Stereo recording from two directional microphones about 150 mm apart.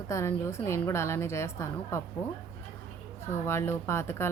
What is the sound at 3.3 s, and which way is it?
Speech, 15° left (ahead or behind).